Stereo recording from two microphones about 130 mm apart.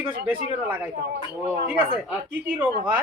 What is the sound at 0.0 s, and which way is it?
Speech, 15° right (ahead or behind).